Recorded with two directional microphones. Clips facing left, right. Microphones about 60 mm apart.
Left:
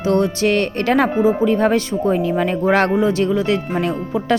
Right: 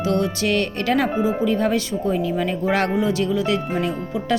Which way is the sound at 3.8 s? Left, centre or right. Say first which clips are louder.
Left 3 dB; left.